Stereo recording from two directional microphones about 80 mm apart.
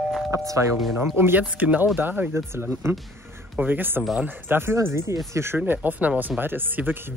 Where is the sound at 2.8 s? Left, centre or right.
Right.